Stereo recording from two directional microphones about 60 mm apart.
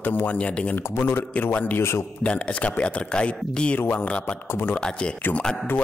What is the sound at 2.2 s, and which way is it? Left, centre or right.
Speech, left.